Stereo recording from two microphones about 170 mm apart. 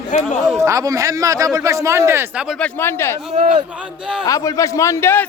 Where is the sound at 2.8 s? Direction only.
15° left (ahead or behind).